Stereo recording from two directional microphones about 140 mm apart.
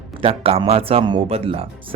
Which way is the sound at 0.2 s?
45° right (ahead or behind).